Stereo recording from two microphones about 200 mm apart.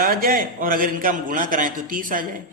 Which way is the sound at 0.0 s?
45° right (ahead or behind).